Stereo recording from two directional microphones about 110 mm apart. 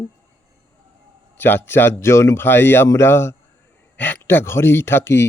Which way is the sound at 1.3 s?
20° left (ahead or behind).